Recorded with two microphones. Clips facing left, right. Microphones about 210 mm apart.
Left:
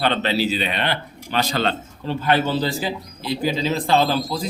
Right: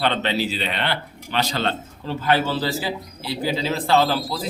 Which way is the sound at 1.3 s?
45° left (ahead or behind).